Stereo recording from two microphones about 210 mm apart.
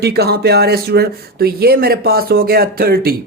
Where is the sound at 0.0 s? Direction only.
50° right (ahead or behind).